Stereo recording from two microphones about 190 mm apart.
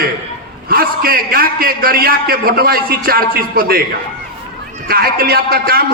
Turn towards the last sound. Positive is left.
turn(degrees=-50)  # may be behind; listen again after turning